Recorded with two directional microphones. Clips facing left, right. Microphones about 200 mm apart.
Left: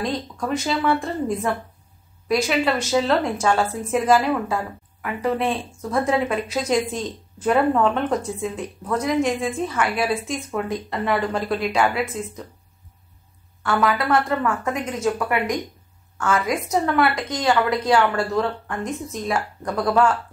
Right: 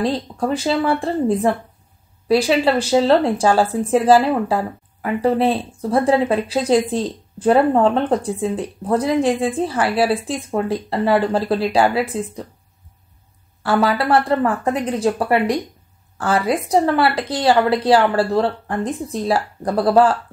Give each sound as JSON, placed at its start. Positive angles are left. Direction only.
{"t": 0.0, "sound": "speech", "side_deg": -30}
{"t": 13.6, "sound": "speech", "side_deg": -30}